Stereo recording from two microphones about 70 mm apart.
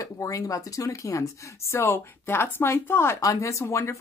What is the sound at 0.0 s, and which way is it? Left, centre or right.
Speech, left.